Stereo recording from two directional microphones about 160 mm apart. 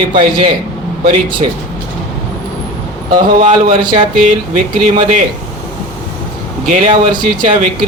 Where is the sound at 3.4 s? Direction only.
30° right (ahead or behind).